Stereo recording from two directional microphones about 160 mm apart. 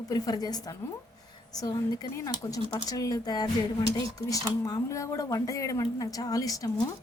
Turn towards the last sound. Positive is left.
turn(degrees=20)  # may be behind; listen again after turning